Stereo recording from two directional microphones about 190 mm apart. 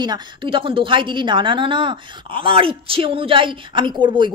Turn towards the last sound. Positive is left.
turn(degrees=-25)  # may be behind; listen again after turning